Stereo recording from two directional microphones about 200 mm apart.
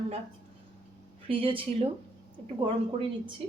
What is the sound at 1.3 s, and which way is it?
A woman's voice, 25° right (ahead or behind).